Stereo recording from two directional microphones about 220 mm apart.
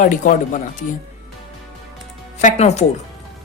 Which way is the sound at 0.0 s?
35° left (ahead or behind).